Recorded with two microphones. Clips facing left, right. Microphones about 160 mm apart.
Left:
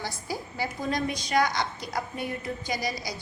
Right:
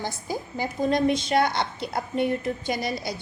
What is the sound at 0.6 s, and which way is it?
A woman's voice, 20° right (ahead or behind).